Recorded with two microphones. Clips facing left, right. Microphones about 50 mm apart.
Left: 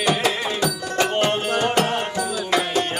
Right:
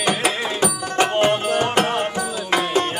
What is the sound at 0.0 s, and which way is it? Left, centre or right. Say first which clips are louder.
Music: even; right.